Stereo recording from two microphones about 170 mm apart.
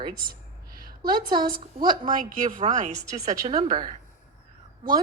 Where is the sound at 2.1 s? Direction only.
50° right (ahead or behind); by 3.6 s 35° right (ahead or behind).